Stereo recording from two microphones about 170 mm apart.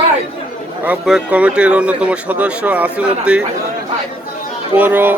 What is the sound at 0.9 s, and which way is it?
Speech, 5° right (ahead or behind).